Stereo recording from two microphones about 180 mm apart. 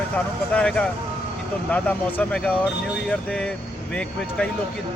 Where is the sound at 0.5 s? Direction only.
5° left (ahead or behind).